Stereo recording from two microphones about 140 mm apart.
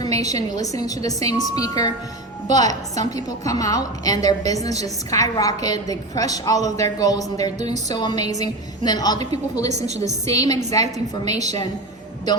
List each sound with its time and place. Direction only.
0.0 s a woman's voice: 25° left (ahead or behind)
11.3 s a woman's voice: 55° right (ahead or behind)